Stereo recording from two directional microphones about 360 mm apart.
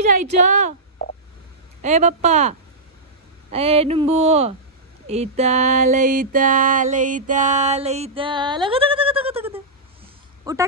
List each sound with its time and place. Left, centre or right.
0.2 s speech: centre
1.8 s speech: centre
3.4 s a sound: centre